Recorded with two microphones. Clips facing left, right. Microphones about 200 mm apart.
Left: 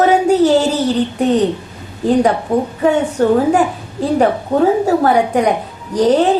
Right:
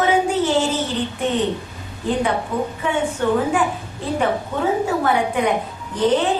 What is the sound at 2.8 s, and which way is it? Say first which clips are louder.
A woman's voice: left 9 dB; 40° left (ahead or behind).